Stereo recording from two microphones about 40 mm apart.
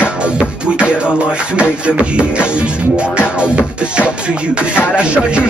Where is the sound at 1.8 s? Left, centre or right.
Right.